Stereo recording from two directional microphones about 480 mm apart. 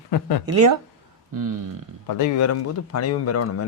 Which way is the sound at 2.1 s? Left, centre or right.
Left.